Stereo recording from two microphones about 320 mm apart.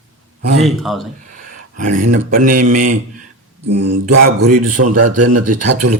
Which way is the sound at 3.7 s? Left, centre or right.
Right.